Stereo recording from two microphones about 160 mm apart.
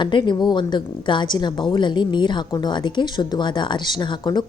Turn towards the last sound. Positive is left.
turn(degrees=30)  # may be behind; listen again after turning